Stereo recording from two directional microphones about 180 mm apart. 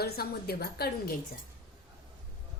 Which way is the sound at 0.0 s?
60° left (ahead or behind).